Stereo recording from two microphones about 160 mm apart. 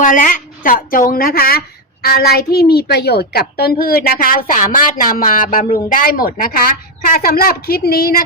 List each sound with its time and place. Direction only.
0.0 s a woman's voice: 55° left (ahead or behind)